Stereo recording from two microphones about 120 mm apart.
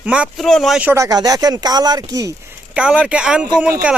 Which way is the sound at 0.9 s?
30° right (ahead or behind).